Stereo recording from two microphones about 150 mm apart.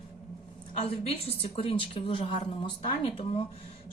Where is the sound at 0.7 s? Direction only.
40° left (ahead or behind).